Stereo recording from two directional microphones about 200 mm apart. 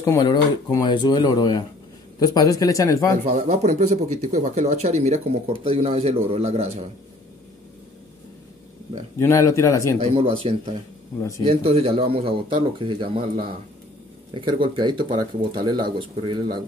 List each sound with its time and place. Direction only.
0.0 s speech: 20° left (ahead or behind)
3.3 s speech: 35° right (ahead or behind)
9.2 s speech: 15° left (ahead or behind)
10.1 s speech: 30° right (ahead or behind)